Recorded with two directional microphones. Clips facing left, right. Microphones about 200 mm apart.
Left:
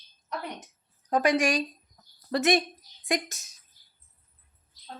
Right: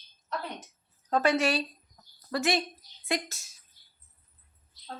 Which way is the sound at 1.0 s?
15° left (ahead or behind).